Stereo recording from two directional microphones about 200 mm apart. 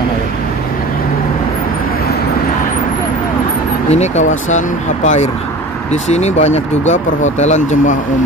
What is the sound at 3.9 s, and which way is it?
Speech, 35° left (ahead or behind).